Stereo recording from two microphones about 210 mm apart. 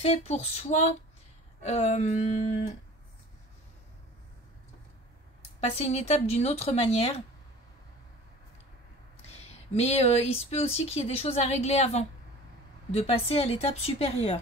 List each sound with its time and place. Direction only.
0.0 s speech: 30° left (ahead or behind)
5.6 s speech: 30° left (ahead or behind)
9.5 s speech: 30° left (ahead or behind)